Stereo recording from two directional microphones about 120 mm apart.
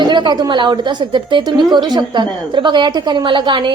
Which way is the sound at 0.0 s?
40° right (ahead or behind).